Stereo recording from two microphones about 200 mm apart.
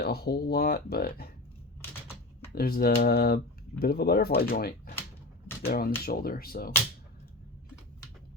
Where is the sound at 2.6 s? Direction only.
50° left (ahead or behind).